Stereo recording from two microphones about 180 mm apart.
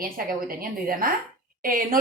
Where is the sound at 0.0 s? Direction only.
55° right (ahead or behind).